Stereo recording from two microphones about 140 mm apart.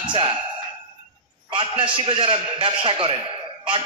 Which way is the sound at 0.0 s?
40° right (ahead or behind).